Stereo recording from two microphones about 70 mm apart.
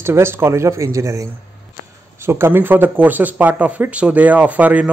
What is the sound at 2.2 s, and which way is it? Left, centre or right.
Speech, right.